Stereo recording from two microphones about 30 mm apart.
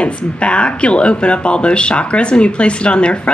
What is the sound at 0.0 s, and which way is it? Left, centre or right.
Speech, left.